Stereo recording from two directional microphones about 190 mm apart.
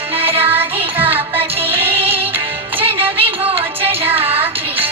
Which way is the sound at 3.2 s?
30° right (ahead or behind).